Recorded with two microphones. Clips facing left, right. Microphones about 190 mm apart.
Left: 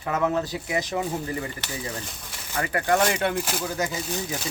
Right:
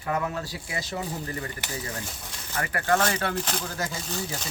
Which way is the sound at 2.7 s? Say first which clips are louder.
Left 2 dB; 15° left (ahead or behind).